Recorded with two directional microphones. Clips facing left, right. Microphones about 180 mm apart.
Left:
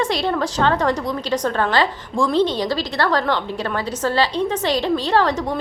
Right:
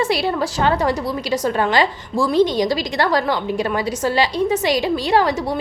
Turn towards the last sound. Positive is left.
turn(degrees=-10)  # may be behind; listen again after turning